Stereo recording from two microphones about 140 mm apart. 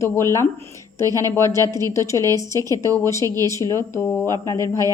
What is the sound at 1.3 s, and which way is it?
Speech, 20° left (ahead or behind).